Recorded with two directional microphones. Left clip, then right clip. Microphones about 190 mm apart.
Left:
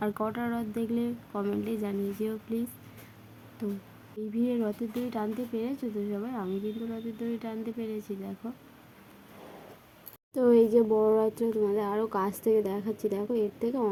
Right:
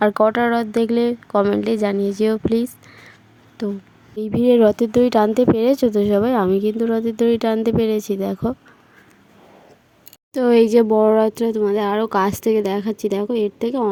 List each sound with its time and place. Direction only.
0.0 s speech: 45° right (ahead or behind)
3.6 s speech: 40° right (ahead or behind)
4.2 s speech: 60° right (ahead or behind)
10.3 s speech: 55° right (ahead or behind)